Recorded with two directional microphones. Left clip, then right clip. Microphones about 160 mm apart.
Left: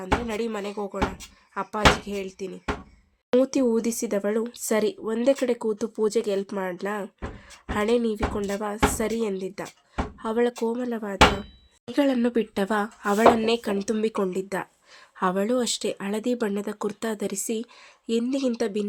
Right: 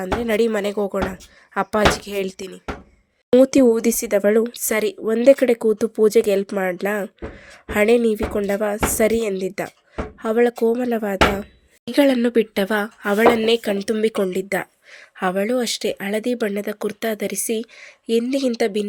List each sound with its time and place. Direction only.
0.0 s speech: 35° right (ahead or behind); by 18.9 s 10° right (ahead or behind)